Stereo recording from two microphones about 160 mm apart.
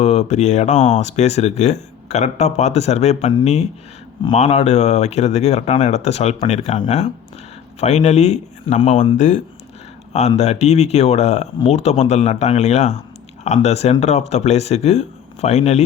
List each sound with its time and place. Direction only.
0.0 s speech: 45° left (ahead or behind)